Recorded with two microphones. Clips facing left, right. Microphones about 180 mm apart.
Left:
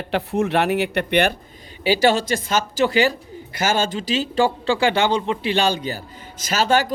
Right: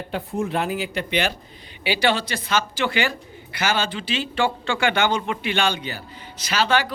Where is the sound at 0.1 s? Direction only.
75° left (ahead or behind); by 1.4 s 60° left (ahead or behind).